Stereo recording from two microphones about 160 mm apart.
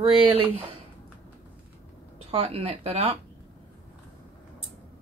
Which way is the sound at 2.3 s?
35° right (ahead or behind).